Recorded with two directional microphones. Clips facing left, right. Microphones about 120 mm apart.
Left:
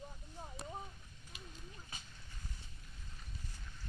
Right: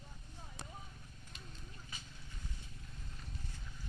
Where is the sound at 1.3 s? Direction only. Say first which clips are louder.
Left 3 dB; 5° left (ahead or behind).